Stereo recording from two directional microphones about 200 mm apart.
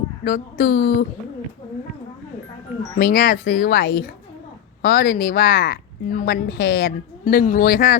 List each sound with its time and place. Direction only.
0.3 s a woman's voice: 50° left (ahead or behind)
3.0 s a woman's voice: 50° left (ahead or behind)